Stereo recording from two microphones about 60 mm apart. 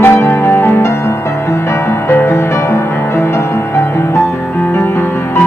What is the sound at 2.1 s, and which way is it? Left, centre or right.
Music, left.